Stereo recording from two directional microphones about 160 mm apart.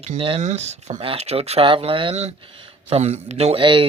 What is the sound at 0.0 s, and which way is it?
Speech, 40° right (ahead or behind).